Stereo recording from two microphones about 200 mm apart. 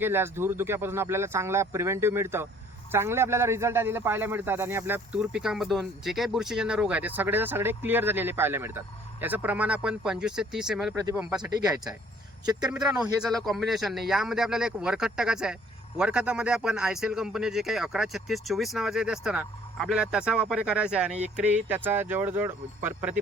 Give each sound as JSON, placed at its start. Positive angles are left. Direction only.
{"t": 0.0, "sound": "a man's voice", "side_deg": -10}
{"t": 11.4, "sound": "speech", "side_deg": -20}
{"t": 12.7, "sound": "a man's voice", "side_deg": -5}